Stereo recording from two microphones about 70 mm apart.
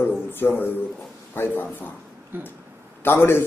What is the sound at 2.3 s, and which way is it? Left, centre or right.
Speech, right.